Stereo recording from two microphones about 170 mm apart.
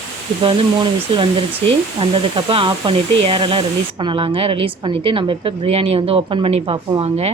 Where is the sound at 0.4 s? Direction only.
30° right (ahead or behind).